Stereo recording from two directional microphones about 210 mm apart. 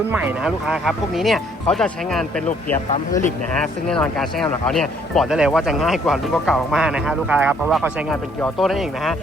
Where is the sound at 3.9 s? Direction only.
Centre (ahead or behind).